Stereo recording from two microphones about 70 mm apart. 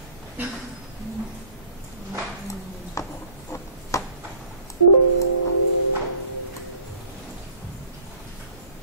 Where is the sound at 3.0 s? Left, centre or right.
Left.